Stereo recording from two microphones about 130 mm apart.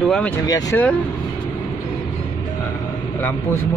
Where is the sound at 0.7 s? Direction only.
15° left (ahead or behind).